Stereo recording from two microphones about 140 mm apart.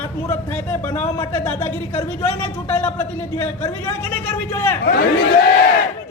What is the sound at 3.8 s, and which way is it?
A man's voice, 15° left (ahead or behind).